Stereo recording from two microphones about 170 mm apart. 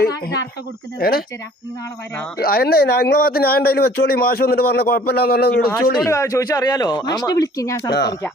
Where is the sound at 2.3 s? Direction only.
65° left (ahead or behind).